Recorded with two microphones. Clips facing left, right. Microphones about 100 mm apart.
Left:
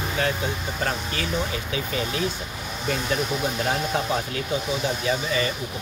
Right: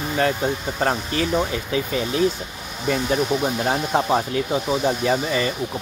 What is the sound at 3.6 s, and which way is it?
Speech, 35° right (ahead or behind).